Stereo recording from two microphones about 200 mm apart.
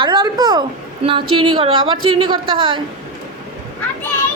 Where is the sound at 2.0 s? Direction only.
90° right.